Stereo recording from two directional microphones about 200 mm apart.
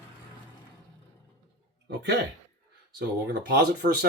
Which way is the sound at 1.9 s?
60° right (ahead or behind).